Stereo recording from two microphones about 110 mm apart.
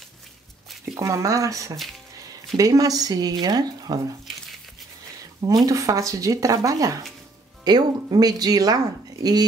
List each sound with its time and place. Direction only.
0.9 s speech: 30° right (ahead or behind)
5.7 s speech: 30° right (ahead or behind)